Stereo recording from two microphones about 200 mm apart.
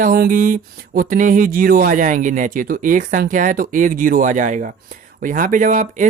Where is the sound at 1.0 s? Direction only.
40° right (ahead or behind).